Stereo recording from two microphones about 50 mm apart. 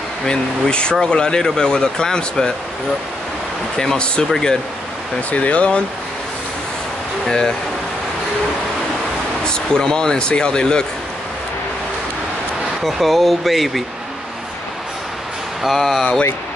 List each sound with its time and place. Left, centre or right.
0.3 s speech: centre
3.7 s speech: centre
5.3 s speech: left
7.2 s speech: centre
9.4 s speech: centre
12.8 s speech: centre
15.8 s speech: centre